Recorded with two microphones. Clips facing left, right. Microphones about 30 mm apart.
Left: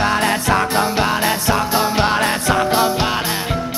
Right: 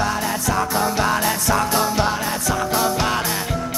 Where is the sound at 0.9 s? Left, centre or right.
Left.